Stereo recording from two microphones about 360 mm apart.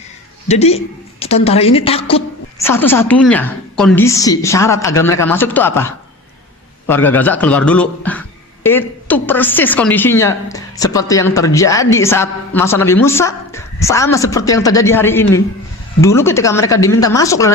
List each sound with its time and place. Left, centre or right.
0.4 s a woman's voice: centre